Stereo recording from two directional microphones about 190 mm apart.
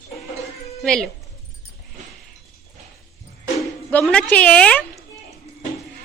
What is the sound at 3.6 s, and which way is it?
Speech, 5° left (ahead or behind).